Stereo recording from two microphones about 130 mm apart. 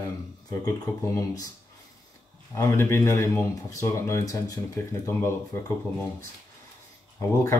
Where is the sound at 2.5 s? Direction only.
20° left (ahead or behind).